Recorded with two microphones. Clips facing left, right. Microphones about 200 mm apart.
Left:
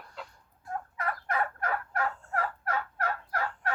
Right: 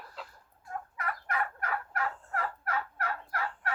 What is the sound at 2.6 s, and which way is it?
Fowl, 35° left (ahead or behind).